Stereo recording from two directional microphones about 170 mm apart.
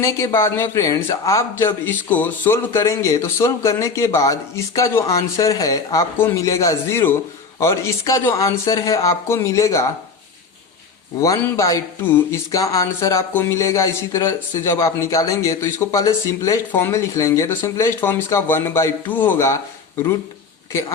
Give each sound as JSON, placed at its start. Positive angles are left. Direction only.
{"t": 0.0, "sound": "speech", "side_deg": 15}
{"t": 11.2, "sound": "speech", "side_deg": 20}